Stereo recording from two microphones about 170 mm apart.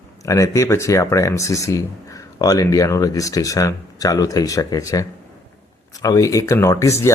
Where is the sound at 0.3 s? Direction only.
15° left (ahead or behind).